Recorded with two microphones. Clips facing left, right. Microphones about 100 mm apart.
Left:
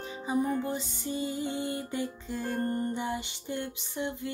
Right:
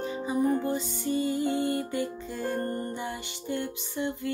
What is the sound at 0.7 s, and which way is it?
Music, 20° left (ahead or behind).